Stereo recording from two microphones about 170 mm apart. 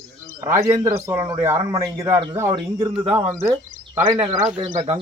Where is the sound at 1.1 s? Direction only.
25° right (ahead or behind).